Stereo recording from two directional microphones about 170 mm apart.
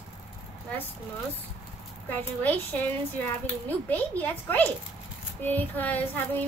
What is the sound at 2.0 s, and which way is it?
Speech, 10° left (ahead or behind).